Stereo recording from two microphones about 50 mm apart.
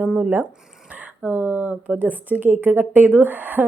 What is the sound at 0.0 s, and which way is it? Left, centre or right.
A woman's voice, right.